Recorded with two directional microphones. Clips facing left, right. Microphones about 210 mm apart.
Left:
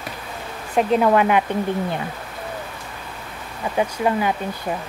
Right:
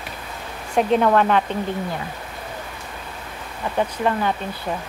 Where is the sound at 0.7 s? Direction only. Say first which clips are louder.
Even; centre (ahead or behind).